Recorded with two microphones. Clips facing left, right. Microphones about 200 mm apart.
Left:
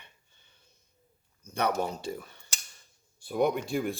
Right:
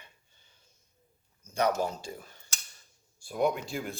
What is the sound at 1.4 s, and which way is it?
Speech, 60° left (ahead or behind).